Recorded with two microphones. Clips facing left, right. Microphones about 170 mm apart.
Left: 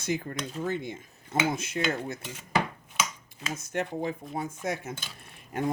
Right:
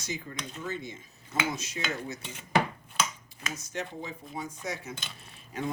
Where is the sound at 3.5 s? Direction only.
55° left (ahead or behind).